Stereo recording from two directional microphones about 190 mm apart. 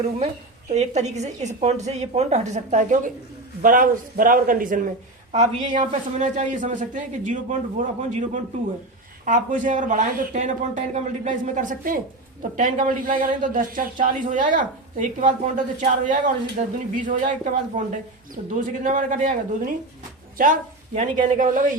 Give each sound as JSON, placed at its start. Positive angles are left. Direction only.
{"t": 0.7, "sound": "speech", "side_deg": -35}
{"t": 5.3, "sound": "a woman's voice", "side_deg": -25}
{"t": 5.8, "sound": "speech", "side_deg": -40}